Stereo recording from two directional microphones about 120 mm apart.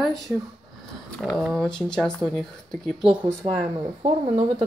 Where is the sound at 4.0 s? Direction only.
40° right (ahead or behind).